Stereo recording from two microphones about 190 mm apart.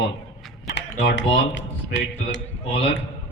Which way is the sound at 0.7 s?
65° left (ahead or behind).